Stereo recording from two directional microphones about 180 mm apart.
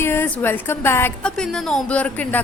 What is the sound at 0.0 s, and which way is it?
A woman's voice, 10° left (ahead or behind).